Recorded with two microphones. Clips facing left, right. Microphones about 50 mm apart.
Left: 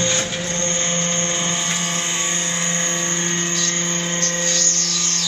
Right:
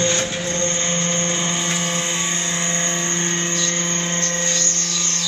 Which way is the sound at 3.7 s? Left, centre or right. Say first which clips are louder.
Even; centre.